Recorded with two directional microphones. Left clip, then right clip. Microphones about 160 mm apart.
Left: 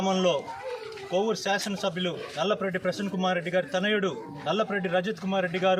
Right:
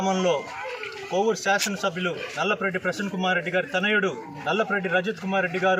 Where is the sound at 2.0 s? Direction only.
25° left (ahead or behind).